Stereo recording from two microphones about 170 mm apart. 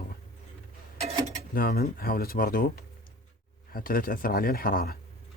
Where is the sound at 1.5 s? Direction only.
60° left (ahead or behind).